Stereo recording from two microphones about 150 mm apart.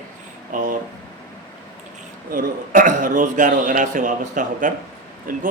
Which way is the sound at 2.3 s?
60° right (ahead or behind).